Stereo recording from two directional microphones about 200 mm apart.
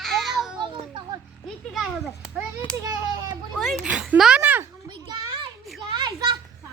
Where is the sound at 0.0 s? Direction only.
Centre (ahead or behind).